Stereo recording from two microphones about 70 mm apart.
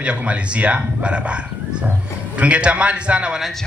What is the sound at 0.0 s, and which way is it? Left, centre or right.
Speech, centre.